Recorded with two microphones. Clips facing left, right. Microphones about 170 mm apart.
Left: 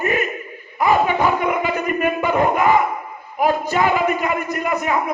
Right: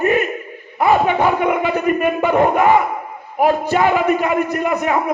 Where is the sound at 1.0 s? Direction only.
60° right (ahead or behind).